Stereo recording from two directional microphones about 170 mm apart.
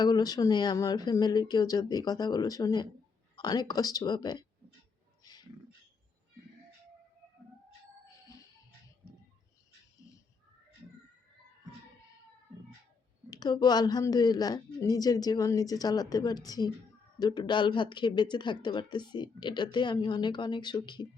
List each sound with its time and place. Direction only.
0.0 s speech: 25° left (ahead or behind)
5.2 s a sound: 25° left (ahead or behind)
13.3 s speech: 25° left (ahead or behind)